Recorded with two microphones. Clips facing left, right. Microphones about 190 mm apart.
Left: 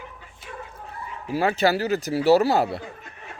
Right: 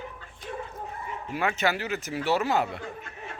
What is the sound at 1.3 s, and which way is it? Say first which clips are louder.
Speech: left 6 dB; 35° left (ahead or behind).